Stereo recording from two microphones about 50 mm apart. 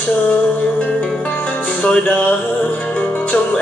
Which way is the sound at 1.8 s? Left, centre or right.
Left.